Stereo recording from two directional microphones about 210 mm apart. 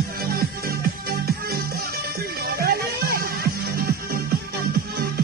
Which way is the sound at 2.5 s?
45° right (ahead or behind).